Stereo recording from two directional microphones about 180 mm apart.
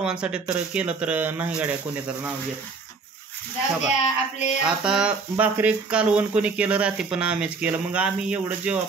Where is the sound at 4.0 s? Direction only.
40° left (ahead or behind).